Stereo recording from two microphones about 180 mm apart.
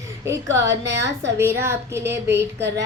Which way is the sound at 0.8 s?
75° right (ahead or behind).